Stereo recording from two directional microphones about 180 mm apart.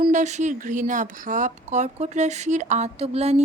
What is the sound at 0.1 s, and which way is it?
Speech, 40° right (ahead or behind).